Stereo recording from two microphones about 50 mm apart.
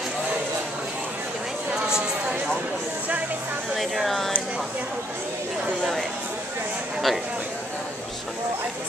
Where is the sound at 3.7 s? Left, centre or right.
Centre.